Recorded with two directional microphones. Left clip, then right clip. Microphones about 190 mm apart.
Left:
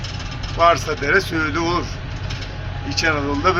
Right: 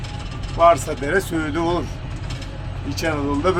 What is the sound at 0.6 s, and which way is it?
Speech, 20° right (ahead or behind).